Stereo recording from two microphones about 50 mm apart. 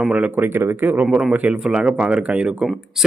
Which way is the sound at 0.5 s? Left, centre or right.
Right.